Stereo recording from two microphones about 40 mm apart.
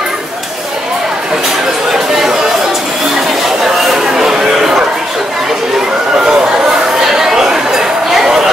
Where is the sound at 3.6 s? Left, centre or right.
Centre.